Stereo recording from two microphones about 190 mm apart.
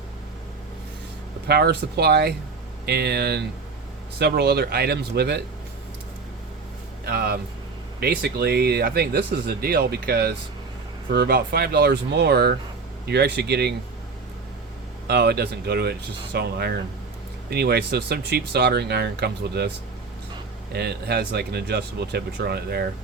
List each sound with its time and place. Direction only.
1.5 s speech: 60° right (ahead or behind)
7.0 s speech: 55° right (ahead or behind)
15.0 s speech: 60° right (ahead or behind)
20.7 s speech: 55° right (ahead or behind)